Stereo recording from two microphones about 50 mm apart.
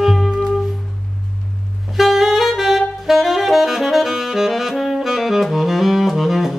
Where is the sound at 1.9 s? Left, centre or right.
Centre.